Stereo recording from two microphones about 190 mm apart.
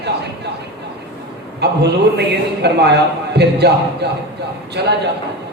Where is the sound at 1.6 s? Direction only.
60° right (ahead or behind).